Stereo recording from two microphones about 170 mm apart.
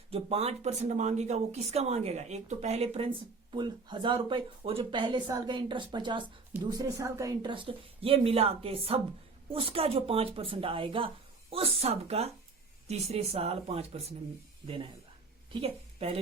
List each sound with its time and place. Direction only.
0.1 s speech: 35° right (ahead or behind)
15.5 s speech: 35° right (ahead or behind)